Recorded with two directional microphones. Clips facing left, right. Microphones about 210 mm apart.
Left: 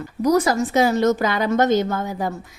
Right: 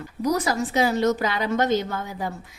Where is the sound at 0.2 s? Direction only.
45° left (ahead or behind).